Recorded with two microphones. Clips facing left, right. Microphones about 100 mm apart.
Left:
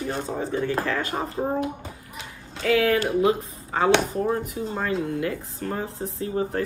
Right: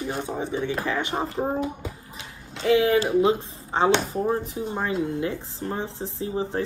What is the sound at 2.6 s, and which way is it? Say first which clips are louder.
Speech: right 1 dB; 25° right (ahead or behind).